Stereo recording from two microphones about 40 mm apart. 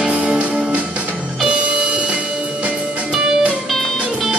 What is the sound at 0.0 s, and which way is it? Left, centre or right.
Music, right.